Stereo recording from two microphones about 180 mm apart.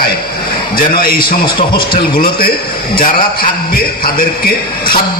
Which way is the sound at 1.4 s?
25° left (ahead or behind).